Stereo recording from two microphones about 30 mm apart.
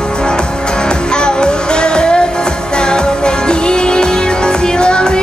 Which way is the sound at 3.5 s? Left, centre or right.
Left.